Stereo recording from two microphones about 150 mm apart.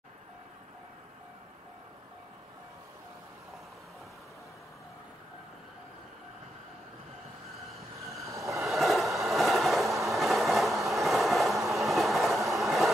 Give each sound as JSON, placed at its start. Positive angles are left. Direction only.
{"t": 8.0, "sound": "train", "side_deg": 0}
{"t": 8.3, "sound": "train", "side_deg": -20}
{"t": 8.6, "sound": "train", "side_deg": 0}